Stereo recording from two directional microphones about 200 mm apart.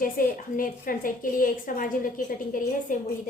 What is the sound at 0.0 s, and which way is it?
A woman's voice, 45° left (ahead or behind).